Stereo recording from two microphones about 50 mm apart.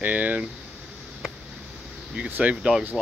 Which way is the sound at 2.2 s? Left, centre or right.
Right.